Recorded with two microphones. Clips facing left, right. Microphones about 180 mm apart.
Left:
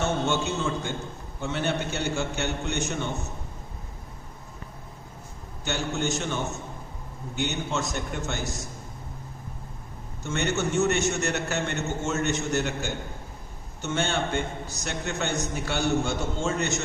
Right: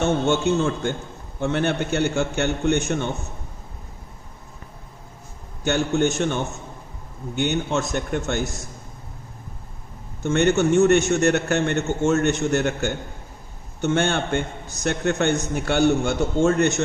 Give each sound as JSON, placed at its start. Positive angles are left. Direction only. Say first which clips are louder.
{"t": 0.0, "sound": "a man's voice", "louder": "right 6 dB", "side_deg": -55}
{"t": 5.6, "sound": "a man's voice", "louder": "right 8 dB", "side_deg": -55}
{"t": 10.2, "sound": "a man's voice", "louder": "right 9 dB", "side_deg": -55}